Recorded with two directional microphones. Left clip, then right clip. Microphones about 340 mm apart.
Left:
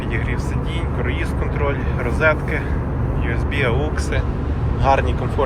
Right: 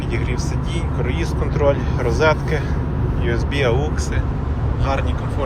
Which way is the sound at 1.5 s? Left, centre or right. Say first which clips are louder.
Right 6 dB; centre.